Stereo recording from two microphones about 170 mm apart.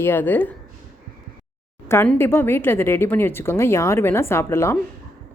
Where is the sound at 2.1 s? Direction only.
15° left (ahead or behind).